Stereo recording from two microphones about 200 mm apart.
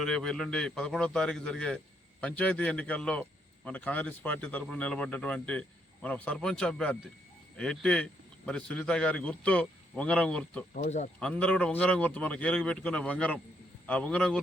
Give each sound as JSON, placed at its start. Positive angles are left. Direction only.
{"t": 0.0, "sound": "a man's voice", "side_deg": 5}
{"t": 10.8, "sound": "speech", "side_deg": 35}
{"t": 11.2, "sound": "speech", "side_deg": 5}